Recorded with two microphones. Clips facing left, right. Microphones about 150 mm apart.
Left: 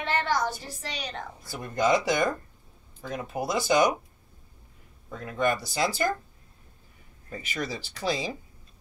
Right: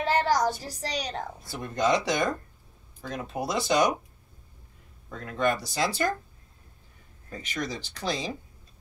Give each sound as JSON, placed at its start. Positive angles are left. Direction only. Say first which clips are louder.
{"t": 0.0, "sound": "a sound", "louder": "right 3 dB", "side_deg": -40}
{"t": 1.6, "sound": "speech", "louder": "left 1 dB", "side_deg": 5}
{"t": 5.1, "sound": "speech", "louder": "even", "side_deg": 5}
{"t": 7.2, "sound": "speech", "louder": "even", "side_deg": 10}